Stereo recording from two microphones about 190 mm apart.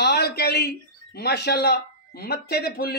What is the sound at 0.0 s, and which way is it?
A man's voice, 60° left (ahead or behind).